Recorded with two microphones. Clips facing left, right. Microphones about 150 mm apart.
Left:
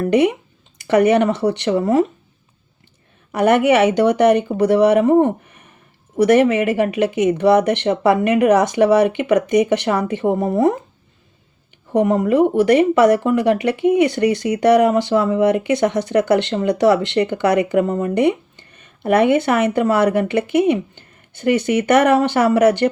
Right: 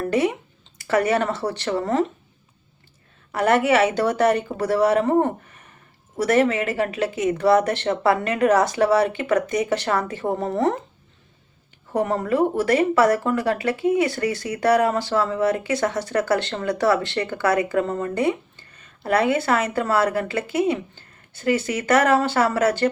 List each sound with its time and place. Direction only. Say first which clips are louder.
0.1 s speech: left 7 dB; 20° left (ahead or behind)
3.3 s speech: left 4 dB; 20° left (ahead or behind)
11.9 s speech: left 6 dB; 15° left (ahead or behind)